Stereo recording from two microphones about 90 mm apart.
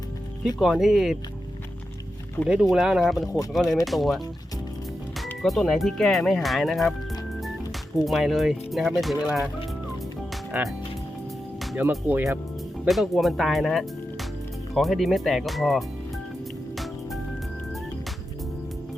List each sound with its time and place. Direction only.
0.6 s speech: 5° right (ahead or behind)
2.5 s speech: 5° right (ahead or behind)
5.4 s speech: 5° left (ahead or behind)
10.5 s speech: 20° right (ahead or behind)
11.8 s speech: 25° right (ahead or behind)
12.9 s speech: centre (ahead or behind)
16.7 s music: centre (ahead or behind)